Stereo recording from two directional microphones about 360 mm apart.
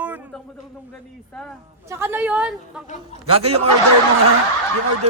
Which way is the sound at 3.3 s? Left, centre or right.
Centre.